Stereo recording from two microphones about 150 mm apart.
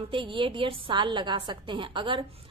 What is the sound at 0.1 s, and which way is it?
A woman's voice, 35° right (ahead or behind).